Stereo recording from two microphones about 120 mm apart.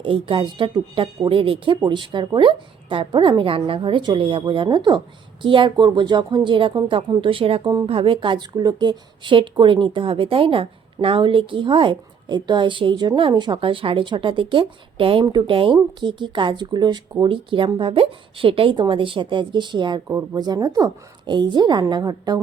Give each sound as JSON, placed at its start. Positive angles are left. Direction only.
{"t": 0.0, "sound": "a woman's voice", "side_deg": -45}